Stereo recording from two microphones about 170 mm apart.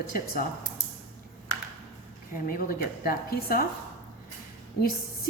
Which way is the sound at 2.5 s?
60° left (ahead or behind).